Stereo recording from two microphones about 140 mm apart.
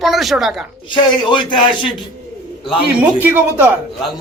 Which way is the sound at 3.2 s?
10° right (ahead or behind).